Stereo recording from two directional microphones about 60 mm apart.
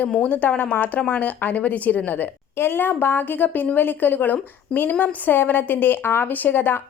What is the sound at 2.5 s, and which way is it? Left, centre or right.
A woman's voice, left.